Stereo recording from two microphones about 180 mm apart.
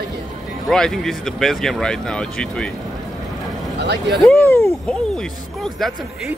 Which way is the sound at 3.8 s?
70° right (ahead or behind).